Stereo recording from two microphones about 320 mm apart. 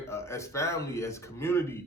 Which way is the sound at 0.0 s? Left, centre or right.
Centre.